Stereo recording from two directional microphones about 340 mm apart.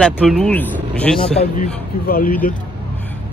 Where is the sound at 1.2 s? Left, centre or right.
Centre.